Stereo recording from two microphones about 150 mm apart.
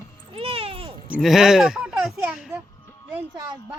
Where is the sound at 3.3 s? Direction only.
25° right (ahead or behind).